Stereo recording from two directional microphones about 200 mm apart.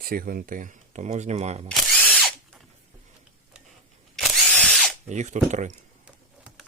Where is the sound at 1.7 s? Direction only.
Centre (ahead or behind).